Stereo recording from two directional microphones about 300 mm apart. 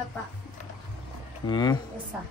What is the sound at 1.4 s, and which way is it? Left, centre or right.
Speech, centre.